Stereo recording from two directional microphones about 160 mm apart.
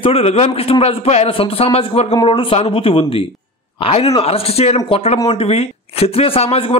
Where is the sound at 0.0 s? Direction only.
40° left (ahead or behind).